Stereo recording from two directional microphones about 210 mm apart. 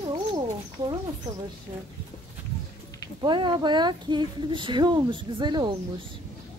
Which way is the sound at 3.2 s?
20° right (ahead or behind).